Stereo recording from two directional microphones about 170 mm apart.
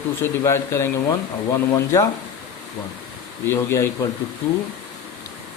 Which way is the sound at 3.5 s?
15° left (ahead or behind).